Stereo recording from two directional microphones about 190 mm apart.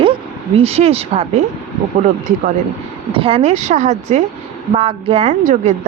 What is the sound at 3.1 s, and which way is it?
A woman's voice, 30° right (ahead or behind).